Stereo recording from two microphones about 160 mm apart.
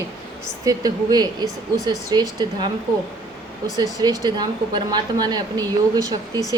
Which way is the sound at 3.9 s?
25° right (ahead or behind).